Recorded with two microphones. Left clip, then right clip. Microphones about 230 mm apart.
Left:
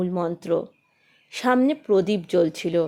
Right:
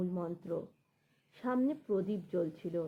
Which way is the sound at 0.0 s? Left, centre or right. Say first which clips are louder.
Left 13 dB; left.